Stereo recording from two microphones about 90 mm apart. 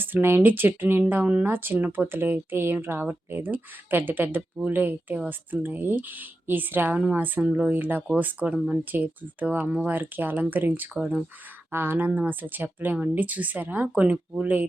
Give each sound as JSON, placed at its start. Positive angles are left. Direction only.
{"t": 0.0, "sound": "speech", "side_deg": -25}